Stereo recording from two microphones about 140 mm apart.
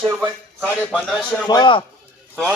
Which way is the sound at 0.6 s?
10° left (ahead or behind).